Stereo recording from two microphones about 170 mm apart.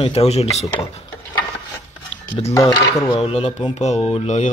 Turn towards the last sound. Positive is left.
turn(degrees=40)  # may be behind; listen again after turning